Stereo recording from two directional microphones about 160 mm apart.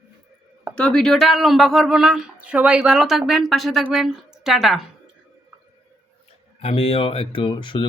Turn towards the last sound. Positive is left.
turn(degrees=30)  # may be behind; listen again after turning